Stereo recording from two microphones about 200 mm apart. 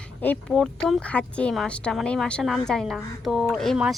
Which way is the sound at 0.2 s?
5° left (ahead or behind).